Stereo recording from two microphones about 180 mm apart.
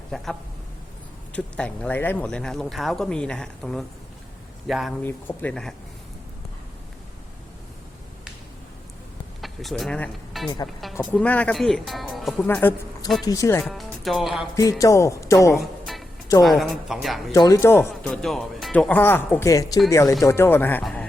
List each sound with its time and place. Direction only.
1.3 s speech: 5° left (ahead or behind)
5.0 s speech: 10° left (ahead or behind)
9.4 s speech: centre (ahead or behind)
12.5 s speech: 10° left (ahead or behind)
13.7 s speech: centre (ahead or behind)
14.5 s speech: 20° left (ahead or behind)
16.4 s speech: centre (ahead or behind)
17.3 s speech: 20° left (ahead or behind)
18.1 s speech: 5° left (ahead or behind)